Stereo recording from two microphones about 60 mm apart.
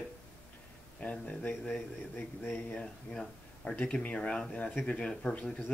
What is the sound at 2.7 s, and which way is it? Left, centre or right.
Speech, centre.